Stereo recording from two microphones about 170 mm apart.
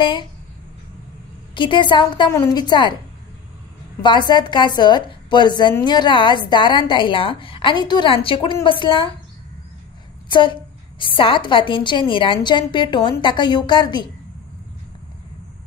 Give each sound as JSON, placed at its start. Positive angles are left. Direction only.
{"t": 0.0, "sound": "a woman's voice", "side_deg": 25}
{"t": 1.5, "sound": "a woman's voice", "side_deg": 30}
{"t": 4.0, "sound": "a woman's voice", "side_deg": 25}
{"t": 10.2, "sound": "a woman's voice", "side_deg": 30}